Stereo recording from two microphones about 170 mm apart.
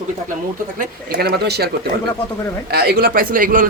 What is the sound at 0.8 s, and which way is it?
Speech, 60° right (ahead or behind).